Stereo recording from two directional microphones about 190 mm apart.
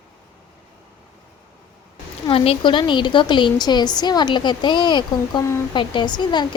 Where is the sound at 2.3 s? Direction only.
25° left (ahead or behind).